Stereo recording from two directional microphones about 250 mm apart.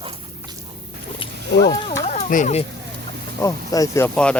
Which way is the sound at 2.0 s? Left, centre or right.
Left.